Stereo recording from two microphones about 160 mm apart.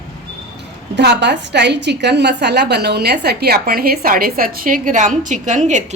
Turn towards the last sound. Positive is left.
turn(degrees=-50)  # may be behind; listen again after turning